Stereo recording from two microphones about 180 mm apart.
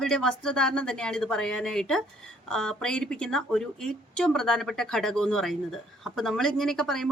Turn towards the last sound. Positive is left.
turn(degrees=0)  # may be behind; listen again after turning